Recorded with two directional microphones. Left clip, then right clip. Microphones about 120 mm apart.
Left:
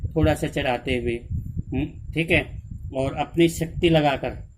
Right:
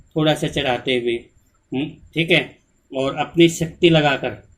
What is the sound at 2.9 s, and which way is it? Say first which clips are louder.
Speech: right 4 dB; 80° left.